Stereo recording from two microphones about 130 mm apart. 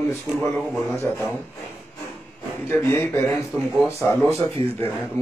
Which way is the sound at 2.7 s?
15° left (ahead or behind).